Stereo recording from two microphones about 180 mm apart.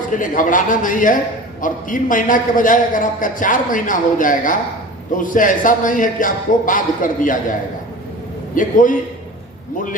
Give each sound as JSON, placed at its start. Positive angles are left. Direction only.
{"t": 0.2, "sound": "a man's voice", "side_deg": 45}
{"t": 8.5, "sound": "a man's voice", "side_deg": 45}